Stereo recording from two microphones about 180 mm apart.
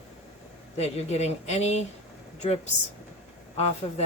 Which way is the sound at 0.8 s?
35° left (ahead or behind).